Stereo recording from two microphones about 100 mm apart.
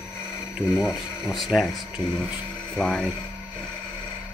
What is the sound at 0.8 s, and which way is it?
Speech, 5° right (ahead or behind).